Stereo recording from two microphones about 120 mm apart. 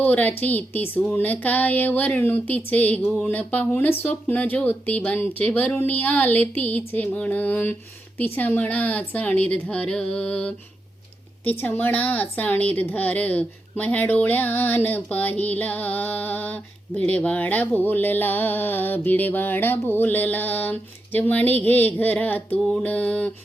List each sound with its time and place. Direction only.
0.0 s a woman's voice: 15° left (ahead or behind)
11.6 s a woman's voice: 15° left (ahead or behind)